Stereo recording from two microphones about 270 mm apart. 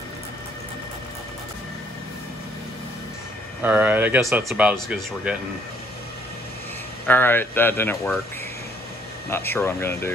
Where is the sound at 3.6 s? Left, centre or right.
Centre.